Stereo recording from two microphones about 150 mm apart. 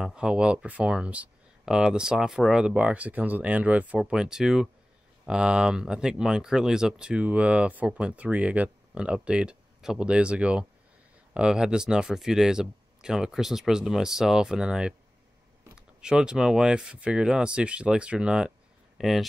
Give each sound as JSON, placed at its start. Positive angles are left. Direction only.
{"t": 0.0, "sound": "speech", "side_deg": -5}